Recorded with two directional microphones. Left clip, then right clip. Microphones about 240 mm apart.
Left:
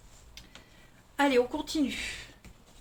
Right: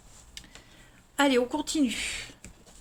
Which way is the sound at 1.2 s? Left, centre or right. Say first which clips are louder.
Right 1 dB; right.